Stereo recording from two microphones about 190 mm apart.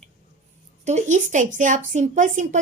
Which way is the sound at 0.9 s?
40° right (ahead or behind).